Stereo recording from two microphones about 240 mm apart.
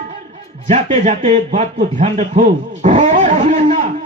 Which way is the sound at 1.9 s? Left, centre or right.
Right.